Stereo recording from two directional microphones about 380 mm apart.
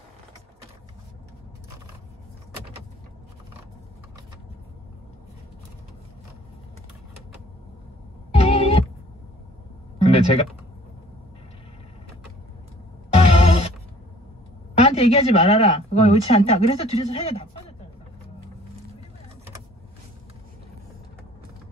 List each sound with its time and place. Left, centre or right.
8.3 s music: centre
10.0 s a sound: centre
13.1 s music: centre
14.9 s speech: centre